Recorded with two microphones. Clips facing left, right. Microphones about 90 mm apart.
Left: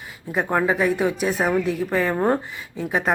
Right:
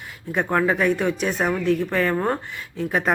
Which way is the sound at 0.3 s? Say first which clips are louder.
Even; 10° left (ahead or behind).